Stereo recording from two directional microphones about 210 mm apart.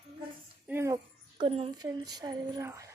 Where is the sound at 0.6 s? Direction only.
10° right (ahead or behind).